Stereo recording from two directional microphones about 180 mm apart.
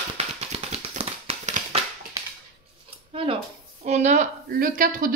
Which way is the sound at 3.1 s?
30° right (ahead or behind).